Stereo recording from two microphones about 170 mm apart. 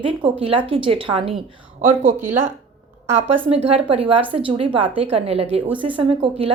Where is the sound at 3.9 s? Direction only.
30° right (ahead or behind).